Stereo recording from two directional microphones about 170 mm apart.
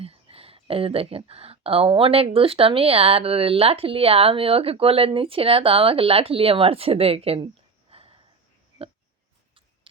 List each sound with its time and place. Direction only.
0.0 s speech: 35° right (ahead or behind)